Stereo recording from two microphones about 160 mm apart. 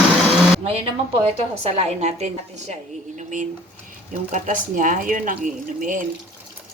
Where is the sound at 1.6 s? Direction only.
40° right (ahead or behind).